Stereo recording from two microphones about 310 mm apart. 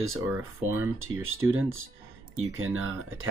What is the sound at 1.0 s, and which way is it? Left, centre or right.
Speech, right.